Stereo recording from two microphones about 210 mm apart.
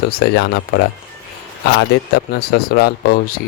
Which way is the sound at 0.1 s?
50° left (ahead or behind).